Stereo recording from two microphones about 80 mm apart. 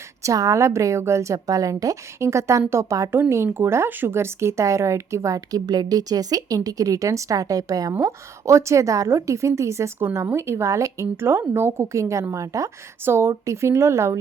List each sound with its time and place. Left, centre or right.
0.2 s a woman's voice: right
13.1 s a woman's voice: right